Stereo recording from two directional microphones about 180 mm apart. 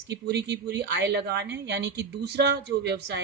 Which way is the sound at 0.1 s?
70° right (ahead or behind).